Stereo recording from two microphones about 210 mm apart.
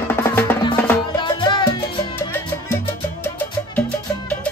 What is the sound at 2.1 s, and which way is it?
Music, 10° left (ahead or behind).